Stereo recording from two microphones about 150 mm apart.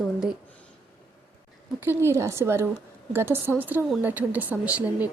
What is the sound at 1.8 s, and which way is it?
Speech, 15° right (ahead or behind).